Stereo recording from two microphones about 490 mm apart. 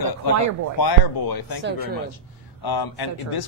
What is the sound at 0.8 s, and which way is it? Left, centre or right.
Speech, left.